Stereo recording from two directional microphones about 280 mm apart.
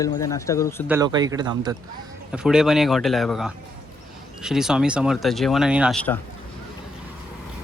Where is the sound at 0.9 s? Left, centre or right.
Centre.